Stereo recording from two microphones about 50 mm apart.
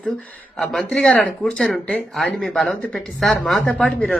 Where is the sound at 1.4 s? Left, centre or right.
Centre.